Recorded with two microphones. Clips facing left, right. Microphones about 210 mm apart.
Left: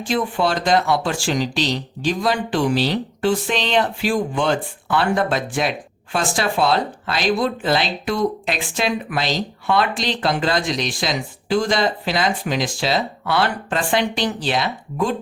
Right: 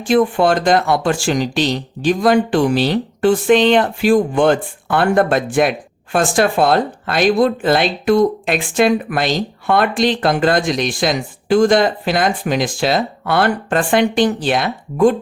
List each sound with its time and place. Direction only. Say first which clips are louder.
0.0 s speech: right 7 dB; 50° right (ahead or behind)